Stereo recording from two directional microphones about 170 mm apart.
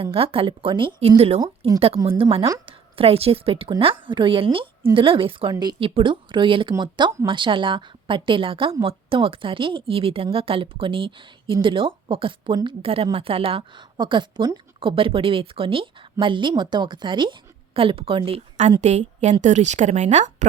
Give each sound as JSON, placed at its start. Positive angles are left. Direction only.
{"t": 0.0, "sound": "a woman's voice", "side_deg": -35}